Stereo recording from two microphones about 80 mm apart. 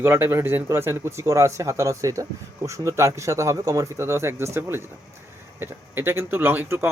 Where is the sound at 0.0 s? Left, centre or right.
Right.